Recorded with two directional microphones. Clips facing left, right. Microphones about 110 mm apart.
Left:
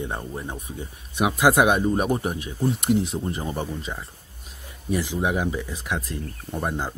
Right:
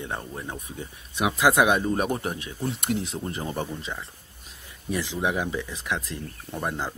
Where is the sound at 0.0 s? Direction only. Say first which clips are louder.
Left 3 dB; 15° left (ahead or behind).